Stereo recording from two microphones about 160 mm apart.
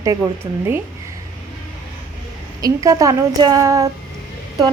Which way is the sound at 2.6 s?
20° right (ahead or behind).